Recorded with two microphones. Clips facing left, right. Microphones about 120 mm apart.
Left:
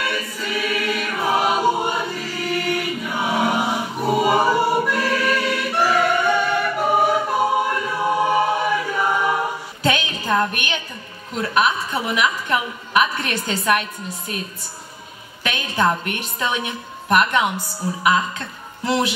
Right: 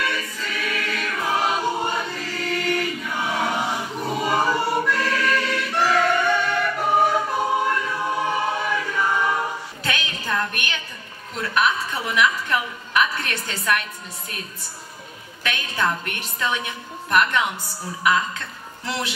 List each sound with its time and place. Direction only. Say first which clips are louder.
0.0 s choir: left 2 dB; 10° left (ahead or behind)
9.8 s music: left 7 dB; 25° left (ahead or behind)
11.4 s a woman's voice: left 2 dB; 20° left (ahead or behind)
15.4 s a woman's voice: left 4 dB; 20° left (ahead or behind)
18.9 s music: left 8 dB; 15° left (ahead or behind)